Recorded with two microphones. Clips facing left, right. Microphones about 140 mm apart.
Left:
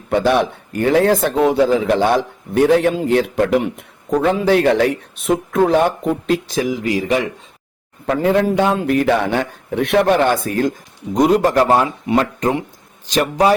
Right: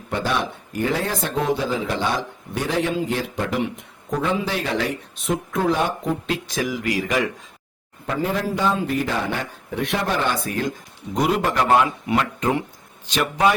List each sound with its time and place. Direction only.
0.1 s speech: 60° left (ahead or behind)
6.5 s a man's voice: 30° left (ahead or behind)
8.0 s a man's voice: 70° left (ahead or behind); by 13.6 s 35° left (ahead or behind)